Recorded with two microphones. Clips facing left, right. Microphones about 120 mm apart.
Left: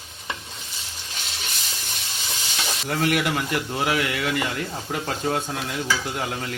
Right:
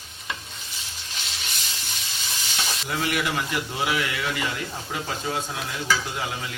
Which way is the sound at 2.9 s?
50° left (ahead or behind).